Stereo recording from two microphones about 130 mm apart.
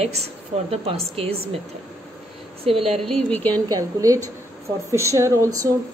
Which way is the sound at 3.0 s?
5° left (ahead or behind).